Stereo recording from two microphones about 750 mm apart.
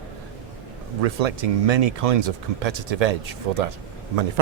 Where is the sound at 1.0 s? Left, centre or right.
Right.